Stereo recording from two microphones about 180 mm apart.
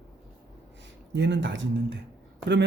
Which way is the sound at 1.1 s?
80° right.